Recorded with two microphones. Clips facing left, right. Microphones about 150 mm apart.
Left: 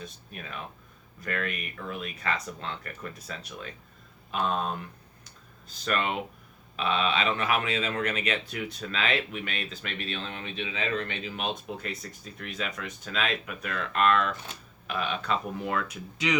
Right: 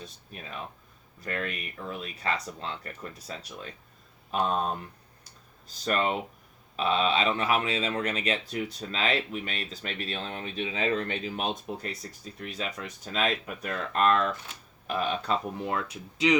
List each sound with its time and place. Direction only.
1.2 s speech: 30° right (ahead or behind)
5.2 s a sound: 35° right (ahead or behind)
6.7 s speech: 35° right (ahead or behind)